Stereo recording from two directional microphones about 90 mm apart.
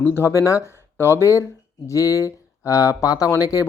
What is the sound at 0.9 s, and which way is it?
Speech, 30° left (ahead or behind).